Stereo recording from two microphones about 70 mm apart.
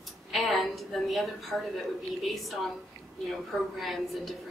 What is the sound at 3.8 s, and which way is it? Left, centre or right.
Speech, centre.